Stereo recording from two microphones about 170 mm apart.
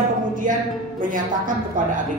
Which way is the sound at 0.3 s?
50° right (ahead or behind).